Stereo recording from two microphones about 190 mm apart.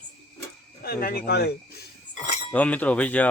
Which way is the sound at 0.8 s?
50° left (ahead or behind).